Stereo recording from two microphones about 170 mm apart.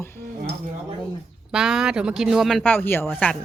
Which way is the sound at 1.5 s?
Centre (ahead or behind).